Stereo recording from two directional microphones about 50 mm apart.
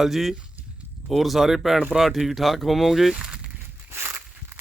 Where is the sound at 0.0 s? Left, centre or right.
Centre.